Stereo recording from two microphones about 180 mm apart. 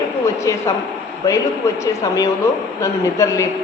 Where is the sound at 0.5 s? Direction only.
20° left (ahead or behind).